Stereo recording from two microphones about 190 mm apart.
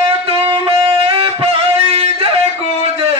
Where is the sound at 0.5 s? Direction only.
30° right (ahead or behind).